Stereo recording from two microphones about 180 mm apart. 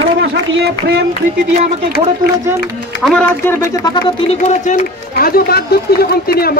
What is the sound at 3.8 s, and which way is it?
Speech, 25° left (ahead or behind).